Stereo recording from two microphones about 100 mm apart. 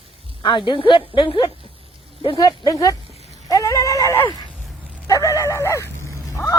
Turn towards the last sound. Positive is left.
turn(degrees=30)  # may be behind; listen again after turning